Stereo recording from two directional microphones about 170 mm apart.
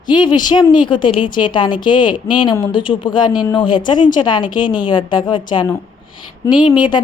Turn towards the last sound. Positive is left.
turn(degrees=25)  # may be behind; listen again after turning